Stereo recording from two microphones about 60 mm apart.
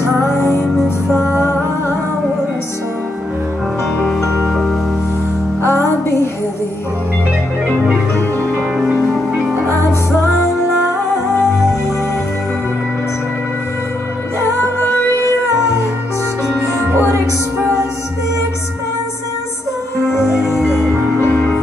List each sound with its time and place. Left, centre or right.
1.1 s music: left
4.2 s music: centre
5.7 s music: left
20.1 s music: centre